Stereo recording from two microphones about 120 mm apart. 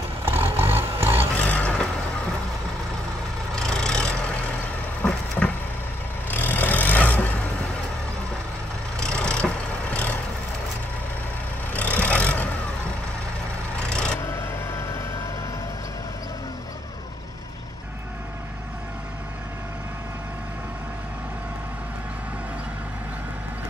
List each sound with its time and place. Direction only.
0.2 s vehicle: 20° right (ahead or behind)
1.3 s a sound: 15° left (ahead or behind)
3.5 s vehicle: 5° left (ahead or behind)
5.4 s vehicle: 10° left (ahead or behind)
9.0 s vehicle: 5° left (ahead or behind)
11.7 s vehicle: 10° left (ahead or behind)
14.7 s vehicle: 25° left (ahead or behind)